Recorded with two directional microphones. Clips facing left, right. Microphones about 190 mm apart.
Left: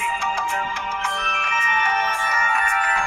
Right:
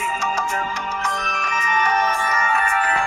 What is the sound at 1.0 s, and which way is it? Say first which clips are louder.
Music: right 2 dB; 40° right (ahead or behind).